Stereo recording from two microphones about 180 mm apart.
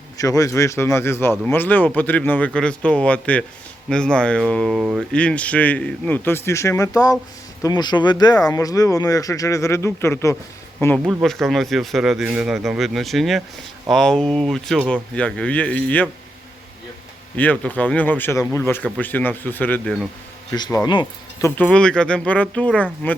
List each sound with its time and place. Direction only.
0.2 s speech: 20° left (ahead or behind)
11.0 s speech: centre (ahead or behind)
17.3 s speech: 10° left (ahead or behind); by 21.5 s 25° left (ahead or behind)
21.5 s speech: 5° left (ahead or behind)